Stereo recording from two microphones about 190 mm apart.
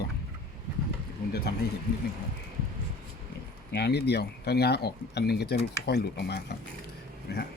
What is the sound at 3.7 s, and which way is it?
Speech, 60° left (ahead or behind).